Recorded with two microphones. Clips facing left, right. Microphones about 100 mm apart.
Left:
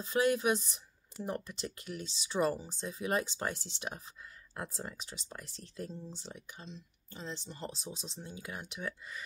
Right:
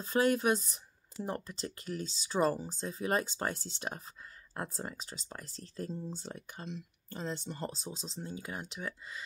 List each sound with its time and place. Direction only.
0.0 s speech: 40° right (ahead or behind)